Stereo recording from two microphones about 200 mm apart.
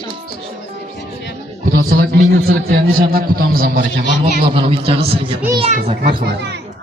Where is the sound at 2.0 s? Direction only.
50° right (ahead or behind).